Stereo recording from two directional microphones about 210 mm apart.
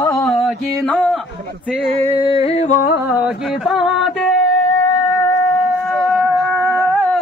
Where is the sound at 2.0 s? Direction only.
20° left (ahead or behind).